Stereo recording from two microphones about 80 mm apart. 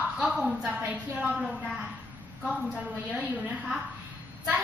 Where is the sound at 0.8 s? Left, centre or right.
Centre.